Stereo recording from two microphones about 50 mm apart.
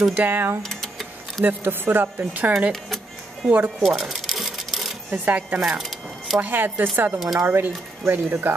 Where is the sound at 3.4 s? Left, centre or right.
Right.